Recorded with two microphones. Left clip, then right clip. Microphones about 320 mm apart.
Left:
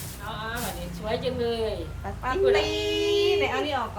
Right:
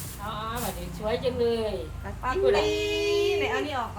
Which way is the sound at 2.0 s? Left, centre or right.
Centre.